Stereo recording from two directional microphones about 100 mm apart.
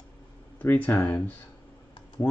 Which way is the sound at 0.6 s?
15° left (ahead or behind).